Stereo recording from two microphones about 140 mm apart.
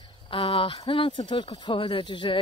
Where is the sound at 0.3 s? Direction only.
40° left (ahead or behind).